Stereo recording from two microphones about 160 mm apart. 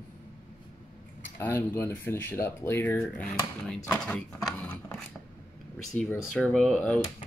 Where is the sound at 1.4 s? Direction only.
15° left (ahead or behind).